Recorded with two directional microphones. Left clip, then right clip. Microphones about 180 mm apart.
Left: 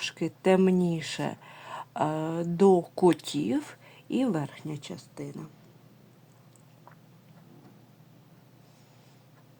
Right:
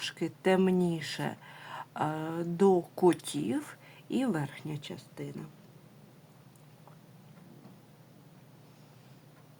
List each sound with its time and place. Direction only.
0.0 s speech: 25° left (ahead or behind)